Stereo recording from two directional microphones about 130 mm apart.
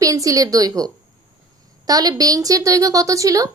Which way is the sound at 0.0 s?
25° right (ahead or behind).